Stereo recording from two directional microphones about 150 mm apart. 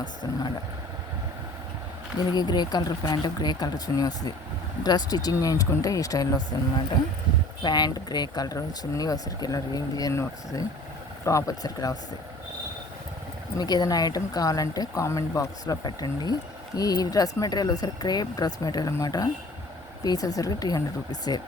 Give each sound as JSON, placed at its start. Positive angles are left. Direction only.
{"t": 0.0, "sound": "speech", "side_deg": 30}
{"t": 2.3, "sound": "speech", "side_deg": 30}
{"t": 7.6, "sound": "speech", "side_deg": 30}
{"t": 13.6, "sound": "speech", "side_deg": 25}